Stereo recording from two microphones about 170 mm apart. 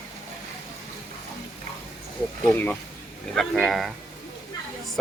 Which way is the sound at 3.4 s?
Centre (ahead or behind).